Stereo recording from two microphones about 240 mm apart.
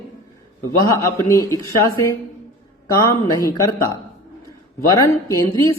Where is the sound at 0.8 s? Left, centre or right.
Centre.